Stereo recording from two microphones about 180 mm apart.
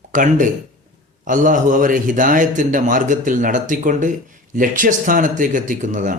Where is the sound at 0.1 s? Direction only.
45° right (ahead or behind).